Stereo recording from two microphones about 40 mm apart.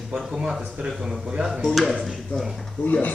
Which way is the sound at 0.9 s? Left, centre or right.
Centre.